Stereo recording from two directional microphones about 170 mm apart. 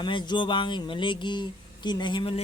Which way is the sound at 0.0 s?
25° left (ahead or behind).